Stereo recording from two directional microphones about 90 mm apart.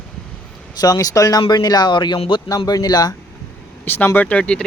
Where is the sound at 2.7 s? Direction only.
45° left (ahead or behind).